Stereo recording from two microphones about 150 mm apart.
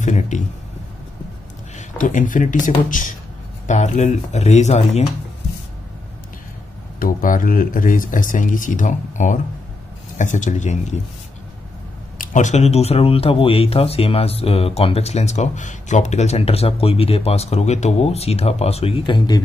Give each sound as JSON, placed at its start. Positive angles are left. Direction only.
{"t": 0.0, "sound": "speech", "side_deg": 55}
{"t": 1.8, "sound": "speech", "side_deg": 60}
{"t": 3.6, "sound": "speech", "side_deg": 50}
{"t": 7.0, "sound": "speech", "side_deg": 65}
{"t": 12.2, "sound": "speech", "side_deg": 60}